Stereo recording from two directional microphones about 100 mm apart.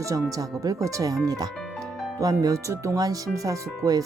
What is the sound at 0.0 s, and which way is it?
Speech, 35° right (ahead or behind).